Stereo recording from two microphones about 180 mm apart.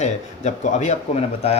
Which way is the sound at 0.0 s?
40° left (ahead or behind).